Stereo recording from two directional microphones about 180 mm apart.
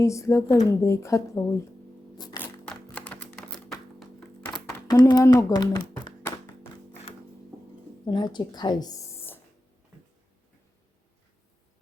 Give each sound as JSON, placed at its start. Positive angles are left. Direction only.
{"t": 0.0, "sound": "a woman's voice", "side_deg": 15}
{"t": 2.1, "sound": "a sound", "side_deg": 25}
{"t": 2.4, "sound": "music", "side_deg": 5}
{"t": 4.7, "sound": "a sound", "side_deg": 25}
{"t": 5.1, "sound": "a woman's voice", "side_deg": 15}
{"t": 6.1, "sound": "music", "side_deg": 20}
{"t": 8.0, "sound": "a woman's voice", "side_deg": 25}